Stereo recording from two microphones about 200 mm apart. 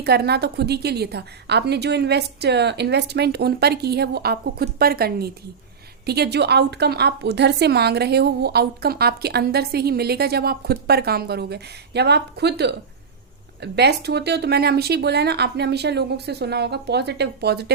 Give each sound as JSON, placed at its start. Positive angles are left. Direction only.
{"t": 0.0, "sound": "a woman's voice", "side_deg": -55}